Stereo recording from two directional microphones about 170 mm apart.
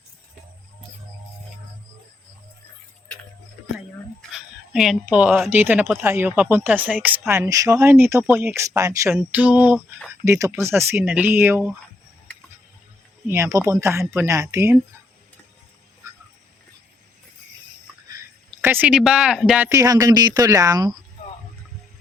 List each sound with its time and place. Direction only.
4.3 s speech: centre (ahead or behind)
13.2 s speech: 15° right (ahead or behind)
18.6 s speech: 10° right (ahead or behind)